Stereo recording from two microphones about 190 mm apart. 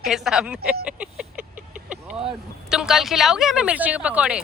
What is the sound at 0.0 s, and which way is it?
Speech, centre (ahead or behind).